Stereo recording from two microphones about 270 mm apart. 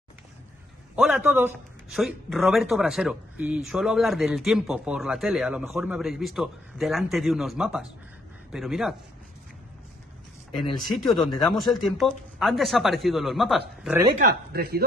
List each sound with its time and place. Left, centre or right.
0.9 s speech: centre
10.9 s speech: centre
14.2 s speech: right